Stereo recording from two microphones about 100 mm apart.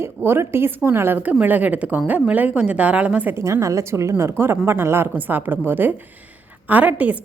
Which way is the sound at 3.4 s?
30° right (ahead or behind).